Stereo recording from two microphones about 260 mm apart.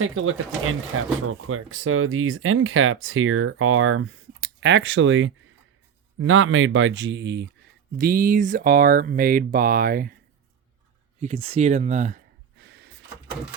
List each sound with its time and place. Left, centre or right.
0.0 s speech: right
11.2 s speech: right
12.6 s a sound: right